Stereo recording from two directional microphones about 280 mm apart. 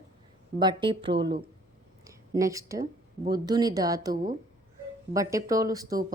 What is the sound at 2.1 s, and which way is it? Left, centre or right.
A woman's voice, centre.